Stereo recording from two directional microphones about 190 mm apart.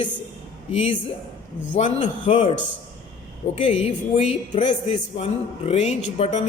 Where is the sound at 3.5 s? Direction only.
30° left (ahead or behind).